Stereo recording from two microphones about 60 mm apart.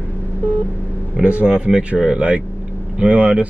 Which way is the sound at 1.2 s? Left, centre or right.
Right.